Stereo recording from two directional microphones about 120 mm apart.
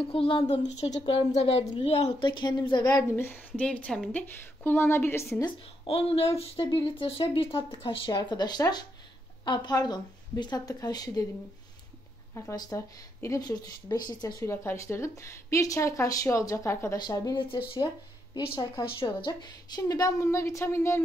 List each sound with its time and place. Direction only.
0.0 s speech: 50° left (ahead or behind)
0.6 s a woman's voice: 70° left (ahead or behind); by 2.2 s 50° left (ahead or behind)
2.2 s speech: 40° left (ahead or behind)
2.9 s speech: 20° left (ahead or behind)
4.6 s speech: 20° left (ahead or behind)
5.9 s speech: 55° left (ahead or behind); by 11.2 s 30° left (ahead or behind)
12.4 s speech: 30° left (ahead or behind)
14.4 s speech: 20° left (ahead or behind)
17.4 s speech: 45° left (ahead or behind); by 21.0 s 20° left (ahead or behind)